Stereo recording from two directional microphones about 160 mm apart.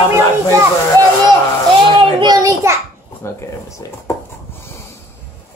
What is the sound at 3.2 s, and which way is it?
Speech, 20° left (ahead or behind).